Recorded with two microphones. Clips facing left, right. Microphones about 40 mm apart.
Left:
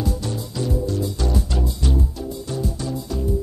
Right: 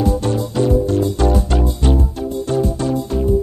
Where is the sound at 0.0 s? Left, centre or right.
Right.